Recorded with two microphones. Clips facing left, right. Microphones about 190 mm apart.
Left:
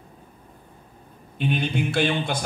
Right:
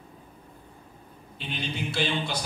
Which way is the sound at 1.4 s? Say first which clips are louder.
Left 9 dB; 55° left (ahead or behind).